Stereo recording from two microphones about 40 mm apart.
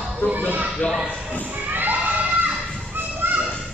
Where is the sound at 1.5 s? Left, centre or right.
Right.